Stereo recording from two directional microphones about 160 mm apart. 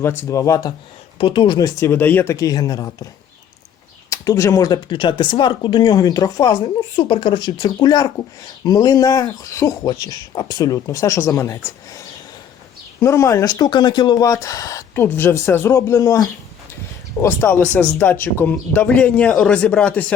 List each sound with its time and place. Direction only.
0.0 s speech: 15° left (ahead or behind)
4.1 s speech: 20° left (ahead or behind)